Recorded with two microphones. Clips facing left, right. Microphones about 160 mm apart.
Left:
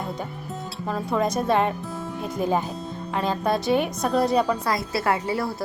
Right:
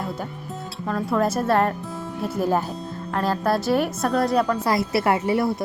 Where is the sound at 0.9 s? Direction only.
5° left (ahead or behind).